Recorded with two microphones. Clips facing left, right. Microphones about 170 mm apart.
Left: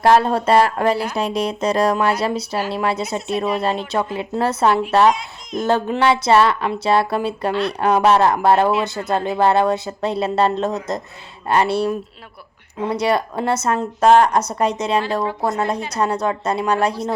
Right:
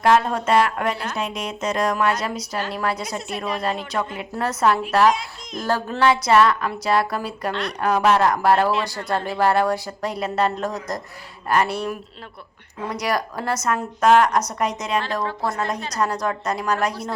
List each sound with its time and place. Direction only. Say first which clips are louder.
0.0 s a woman's voice: left 3 dB; 35° left (ahead or behind)
15.1 s a woman's voice: left 4 dB; 20° left (ahead or behind)